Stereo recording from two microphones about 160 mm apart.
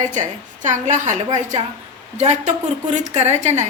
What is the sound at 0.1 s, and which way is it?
Speech, 50° right (ahead or behind).